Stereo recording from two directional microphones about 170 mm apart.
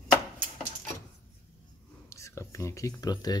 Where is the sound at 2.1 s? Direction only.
15° left (ahead or behind).